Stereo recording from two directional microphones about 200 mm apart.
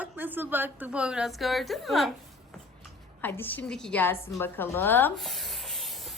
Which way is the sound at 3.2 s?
10° left (ahead or behind).